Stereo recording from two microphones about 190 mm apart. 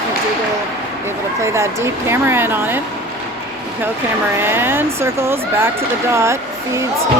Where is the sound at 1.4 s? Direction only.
15° right (ahead or behind).